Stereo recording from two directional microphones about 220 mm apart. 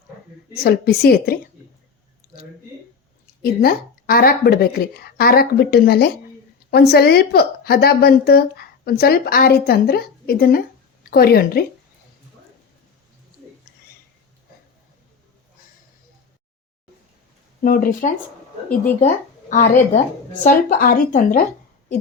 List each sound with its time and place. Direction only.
0.5 s a woman's voice: 45° left (ahead or behind)
3.4 s a woman's voice: 45° left (ahead or behind)
17.6 s speech: 40° left (ahead or behind)